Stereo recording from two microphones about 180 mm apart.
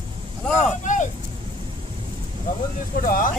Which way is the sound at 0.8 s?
45° left (ahead or behind).